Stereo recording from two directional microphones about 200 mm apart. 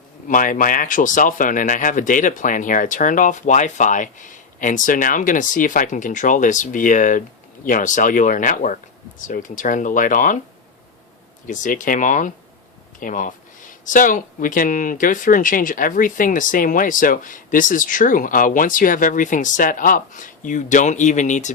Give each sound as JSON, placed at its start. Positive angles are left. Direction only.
{"t": 0.3, "sound": "speech", "side_deg": 40}
{"t": 11.4, "sound": "speech", "side_deg": 40}